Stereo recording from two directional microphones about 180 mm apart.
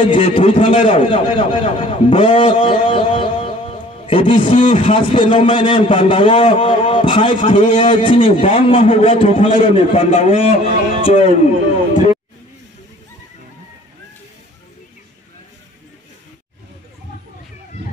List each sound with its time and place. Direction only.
0.0 s a man's voice: 30° left (ahead or behind)